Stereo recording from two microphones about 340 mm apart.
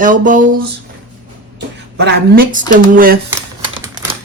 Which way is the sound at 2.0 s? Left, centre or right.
Right.